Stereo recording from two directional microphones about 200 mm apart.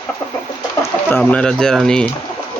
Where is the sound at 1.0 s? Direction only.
10° left (ahead or behind).